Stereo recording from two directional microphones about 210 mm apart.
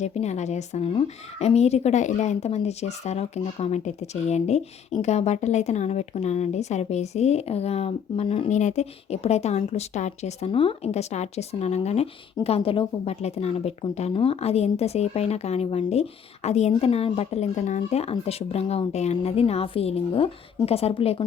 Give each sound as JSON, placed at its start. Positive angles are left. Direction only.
{"t": 0.0, "sound": "speech", "side_deg": 30}